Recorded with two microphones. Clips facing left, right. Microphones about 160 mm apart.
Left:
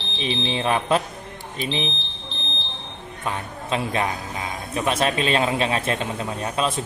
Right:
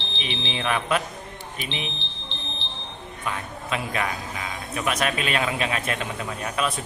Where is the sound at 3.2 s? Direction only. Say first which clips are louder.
Left 3 dB; 30° left (ahead or behind).